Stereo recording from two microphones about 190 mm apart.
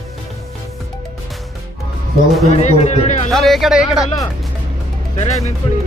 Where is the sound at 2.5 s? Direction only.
35° left (ahead or behind).